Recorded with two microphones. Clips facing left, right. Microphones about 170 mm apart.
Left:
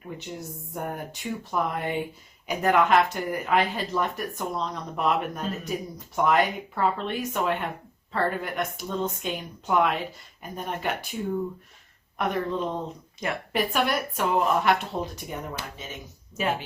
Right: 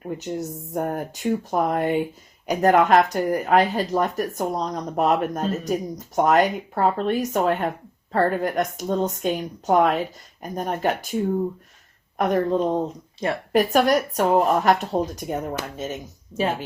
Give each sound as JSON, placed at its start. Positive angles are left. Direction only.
{"t": 0.2, "sound": "speech", "side_deg": -40}
{"t": 12.1, "sound": "speech", "side_deg": -45}